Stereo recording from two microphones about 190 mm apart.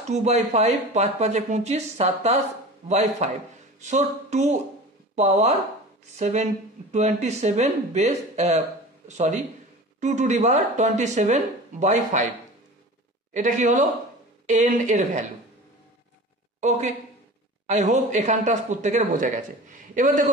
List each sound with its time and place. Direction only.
0.1 s speech: 35° right (ahead or behind)
13.3 s speech: 40° right (ahead or behind)
16.6 s a man's voice: 40° right (ahead or behind)